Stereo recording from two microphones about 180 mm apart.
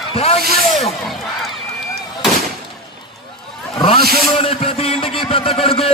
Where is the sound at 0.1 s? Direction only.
35° left (ahead or behind).